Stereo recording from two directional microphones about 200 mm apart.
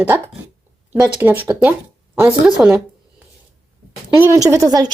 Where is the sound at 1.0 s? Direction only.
10° right (ahead or behind).